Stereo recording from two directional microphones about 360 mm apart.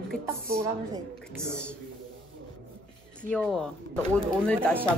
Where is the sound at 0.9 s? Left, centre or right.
Centre.